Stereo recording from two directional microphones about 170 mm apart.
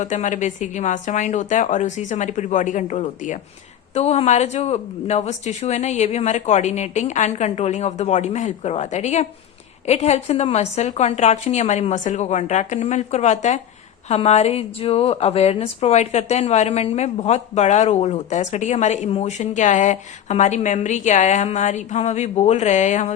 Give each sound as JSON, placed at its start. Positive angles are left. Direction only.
{"t": 0.0, "sound": "a woman's voice", "side_deg": 45}